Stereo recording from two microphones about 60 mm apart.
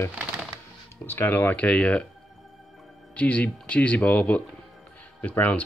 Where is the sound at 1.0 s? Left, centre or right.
Left; by 2.0 s centre.